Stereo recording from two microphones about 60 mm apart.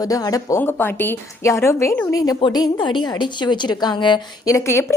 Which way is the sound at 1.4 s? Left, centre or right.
Left.